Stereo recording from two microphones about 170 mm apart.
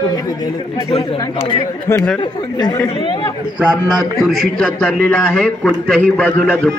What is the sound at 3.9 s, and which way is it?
A man's voice, centre (ahead or behind).